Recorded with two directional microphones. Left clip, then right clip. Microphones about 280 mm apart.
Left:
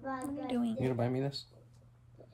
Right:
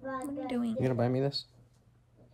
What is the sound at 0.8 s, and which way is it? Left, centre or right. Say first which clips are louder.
Speech: right 7 dB; centre.